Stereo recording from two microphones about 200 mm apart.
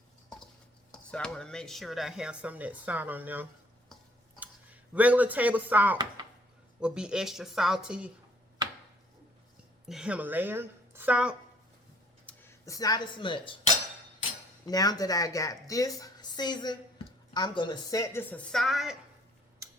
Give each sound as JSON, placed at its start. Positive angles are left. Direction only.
{"t": 1.1, "sound": "speech", "side_deg": 5}
{"t": 9.9, "sound": "a woman's voice", "side_deg": -5}
{"t": 12.2, "sound": "speech", "side_deg": 10}
{"t": 14.7, "sound": "a woman's voice", "side_deg": 20}